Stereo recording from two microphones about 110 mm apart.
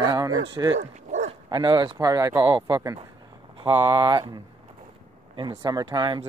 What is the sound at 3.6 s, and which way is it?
Speech, 55° right (ahead or behind).